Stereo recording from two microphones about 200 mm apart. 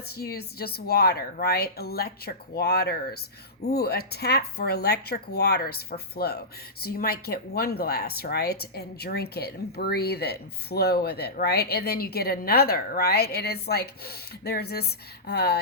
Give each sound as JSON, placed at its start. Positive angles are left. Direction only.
{"t": 0.2, "sound": "speech", "side_deg": 50}